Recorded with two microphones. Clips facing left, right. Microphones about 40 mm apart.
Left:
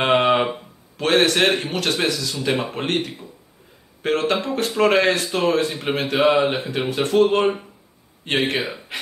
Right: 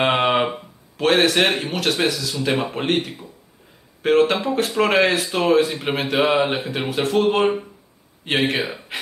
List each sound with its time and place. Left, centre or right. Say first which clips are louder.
0.0 s a man's voice: left 1 dB; centre